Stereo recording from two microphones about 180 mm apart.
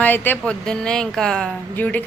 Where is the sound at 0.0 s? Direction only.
10° left (ahead or behind).